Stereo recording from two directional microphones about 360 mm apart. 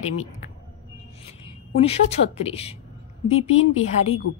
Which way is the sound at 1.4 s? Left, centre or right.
Centre.